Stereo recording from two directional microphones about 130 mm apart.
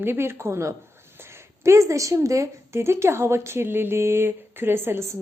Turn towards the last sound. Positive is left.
turn(degrees=-15)  # may be behind; listen again after turning